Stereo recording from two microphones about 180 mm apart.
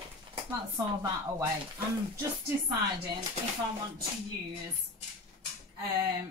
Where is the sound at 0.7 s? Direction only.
20° right (ahead or behind).